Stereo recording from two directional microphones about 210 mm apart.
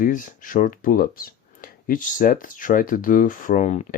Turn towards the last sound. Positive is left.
turn(degrees=35)  # may be behind; listen again after turning